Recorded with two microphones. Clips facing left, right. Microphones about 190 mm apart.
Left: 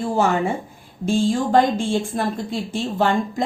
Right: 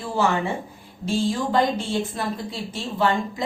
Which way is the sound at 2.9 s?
45° left (ahead or behind).